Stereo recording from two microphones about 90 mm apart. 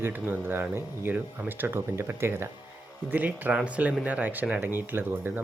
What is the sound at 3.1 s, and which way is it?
Speech, 20° right (ahead or behind).